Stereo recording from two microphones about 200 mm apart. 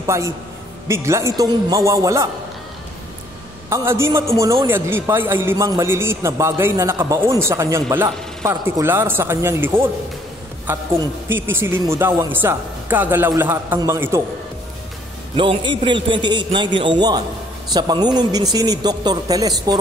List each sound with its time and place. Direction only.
0.0 s a man's voice: 15° right (ahead or behind)
3.7 s a man's voice: 15° right (ahead or behind)
15.3 s a man's voice: 25° right (ahead or behind)